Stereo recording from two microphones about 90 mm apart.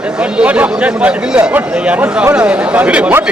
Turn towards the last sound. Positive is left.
turn(degrees=-15)  # may be behind; listen again after turning